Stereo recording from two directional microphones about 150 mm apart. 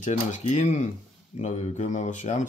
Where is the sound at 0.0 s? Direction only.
50° left (ahead or behind).